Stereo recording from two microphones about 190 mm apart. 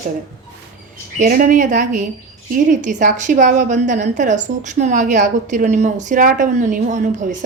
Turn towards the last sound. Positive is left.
turn(degrees=-40)  # may be behind; listen again after turning